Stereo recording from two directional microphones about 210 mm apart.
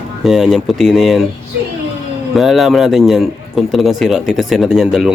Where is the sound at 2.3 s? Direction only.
Centre (ahead or behind).